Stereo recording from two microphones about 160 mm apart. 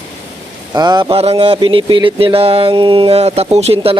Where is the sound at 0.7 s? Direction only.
25° right (ahead or behind).